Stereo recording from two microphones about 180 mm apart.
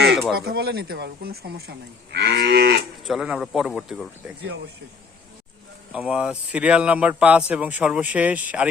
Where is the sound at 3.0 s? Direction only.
Centre (ahead or behind).